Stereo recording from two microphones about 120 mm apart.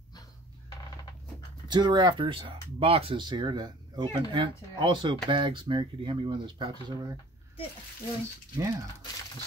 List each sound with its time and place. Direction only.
1.7 s speech: 35° right (ahead or behind)
8.5 s speech: 30° right (ahead or behind)